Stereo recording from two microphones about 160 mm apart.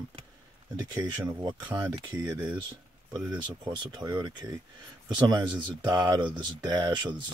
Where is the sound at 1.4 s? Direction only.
30° right (ahead or behind).